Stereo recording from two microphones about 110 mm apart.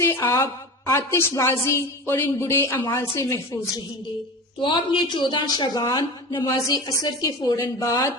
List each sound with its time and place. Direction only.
0.1 s a woman's voice: 25° left (ahead or behind)
4.6 s a woman's voice: 50° left (ahead or behind); by 8.1 s 30° left (ahead or behind)